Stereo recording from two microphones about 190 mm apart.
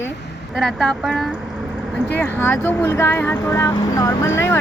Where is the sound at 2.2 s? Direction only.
10° left (ahead or behind).